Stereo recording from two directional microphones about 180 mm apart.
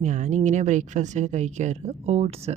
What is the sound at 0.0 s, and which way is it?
A woman's voice, 40° right (ahead or behind).